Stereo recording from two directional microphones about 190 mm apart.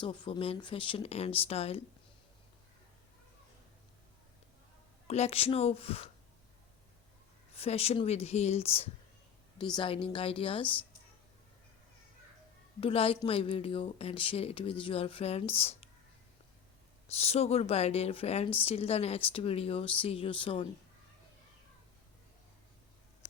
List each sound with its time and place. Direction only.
0.0 s speech: 25° left (ahead or behind)
5.0 s speech: 35° left (ahead or behind)
7.5 s speech: 30° left (ahead or behind)
12.8 s speech: 30° left (ahead or behind)
17.2 s speech: 35° left (ahead or behind)